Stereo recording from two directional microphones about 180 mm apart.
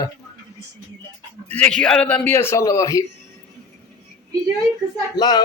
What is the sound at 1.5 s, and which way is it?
Speech, 5° left (ahead or behind).